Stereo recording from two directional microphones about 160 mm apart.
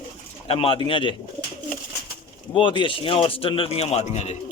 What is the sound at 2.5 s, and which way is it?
A man's voice, 30° left (ahead or behind).